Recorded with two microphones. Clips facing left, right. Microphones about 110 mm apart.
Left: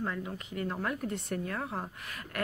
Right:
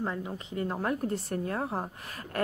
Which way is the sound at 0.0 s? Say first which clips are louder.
Right 2 dB; 25° right (ahead or behind).